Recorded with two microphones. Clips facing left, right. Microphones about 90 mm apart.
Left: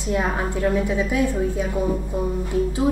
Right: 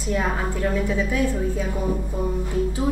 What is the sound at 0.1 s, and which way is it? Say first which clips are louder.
A woman's voice: left 1 dB; 15° left (ahead or behind).